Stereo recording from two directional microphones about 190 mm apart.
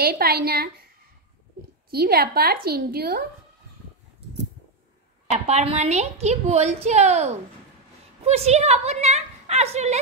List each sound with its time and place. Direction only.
0.0 s a woman's voice: 55° right (ahead or behind)
1.9 s a woman's voice: 55° right (ahead or behind)
5.3 s a woman's voice: 35° right (ahead or behind)